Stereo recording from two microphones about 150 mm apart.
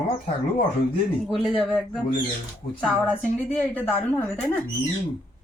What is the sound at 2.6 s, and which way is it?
Speech, 65° left (ahead or behind).